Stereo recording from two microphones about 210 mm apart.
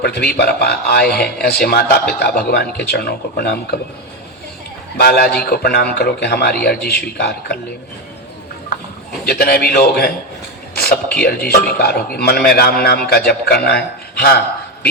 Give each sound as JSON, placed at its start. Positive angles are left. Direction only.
{"t": 0.0, "sound": "a man's voice", "side_deg": 50}
{"t": 4.9, "sound": "a man's voice", "side_deg": 50}
{"t": 9.2, "sound": "a man's voice", "side_deg": 50}